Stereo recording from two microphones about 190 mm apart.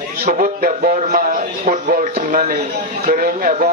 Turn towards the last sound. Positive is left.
turn(degrees=-45)  # may be behind; listen again after turning